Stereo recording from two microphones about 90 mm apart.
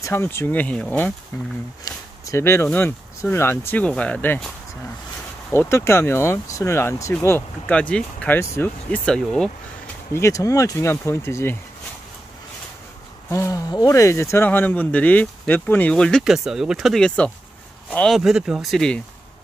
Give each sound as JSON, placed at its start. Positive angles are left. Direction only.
{"t": 0.1, "sound": "speech", "side_deg": 25}
{"t": 5.5, "sound": "speech", "side_deg": 30}
{"t": 7.2, "sound": "speech", "side_deg": 20}
{"t": 8.6, "sound": "speech", "side_deg": 25}
{"t": 8.9, "sound": "speech", "side_deg": 10}
{"t": 10.1, "sound": "speech", "side_deg": 35}
{"t": 13.3, "sound": "speech", "side_deg": 35}
{"t": 16.3, "sound": "speech", "side_deg": -5}
{"t": 18.0, "sound": "speech", "side_deg": 0}